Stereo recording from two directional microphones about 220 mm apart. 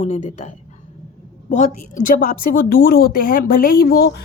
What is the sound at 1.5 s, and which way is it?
A woman's voice, 35° left (ahead or behind).